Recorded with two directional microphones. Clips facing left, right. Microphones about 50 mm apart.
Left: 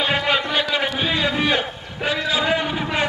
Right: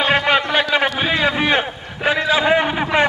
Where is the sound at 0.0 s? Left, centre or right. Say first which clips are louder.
Right 4 dB; right.